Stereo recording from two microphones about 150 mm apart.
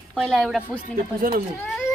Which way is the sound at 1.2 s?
60° right (ahead or behind).